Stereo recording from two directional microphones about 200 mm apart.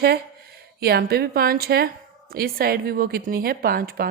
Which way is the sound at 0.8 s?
50° right (ahead or behind).